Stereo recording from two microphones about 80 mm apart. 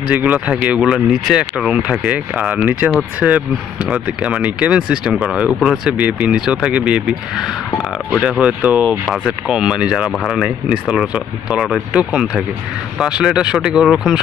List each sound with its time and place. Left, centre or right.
0.1 s speech: right